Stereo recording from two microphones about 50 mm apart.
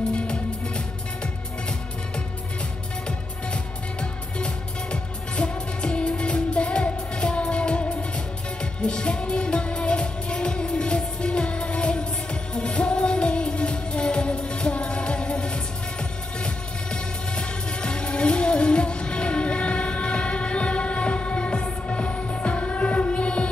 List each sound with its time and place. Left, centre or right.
0.1 s music: centre
4.9 s music: left
8.8 s music: centre